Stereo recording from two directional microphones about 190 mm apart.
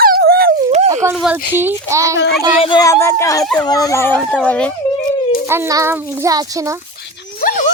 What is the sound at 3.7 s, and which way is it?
Speech, 20° left (ahead or behind).